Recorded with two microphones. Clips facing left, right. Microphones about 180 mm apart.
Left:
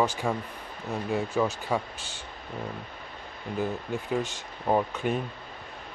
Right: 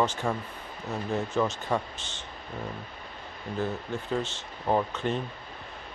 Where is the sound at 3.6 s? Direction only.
15° left (ahead or behind).